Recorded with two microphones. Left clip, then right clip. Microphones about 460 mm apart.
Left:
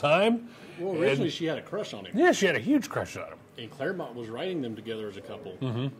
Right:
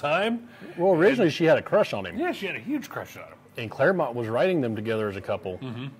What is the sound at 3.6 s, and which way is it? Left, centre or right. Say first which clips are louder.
Speech: right 11 dB; right.